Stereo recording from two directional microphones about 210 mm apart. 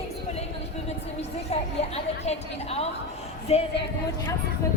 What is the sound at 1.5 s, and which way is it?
A woman's voice, 30° left (ahead or behind).